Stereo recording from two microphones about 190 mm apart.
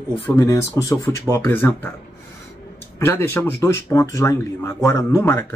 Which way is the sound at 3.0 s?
10° left (ahead or behind).